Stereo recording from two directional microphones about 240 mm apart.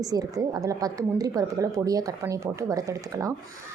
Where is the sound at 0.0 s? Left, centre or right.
Centre.